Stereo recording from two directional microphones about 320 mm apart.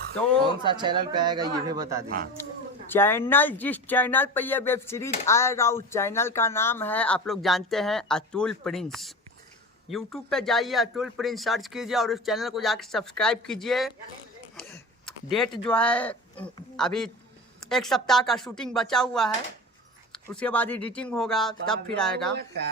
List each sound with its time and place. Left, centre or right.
0.3 s speech: centre
2.9 s speech: centre
14.5 s a sound: centre
15.6 s speech: centre
22.3 s speech: right